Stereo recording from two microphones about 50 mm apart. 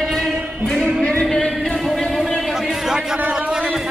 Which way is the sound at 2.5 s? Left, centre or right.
Centre.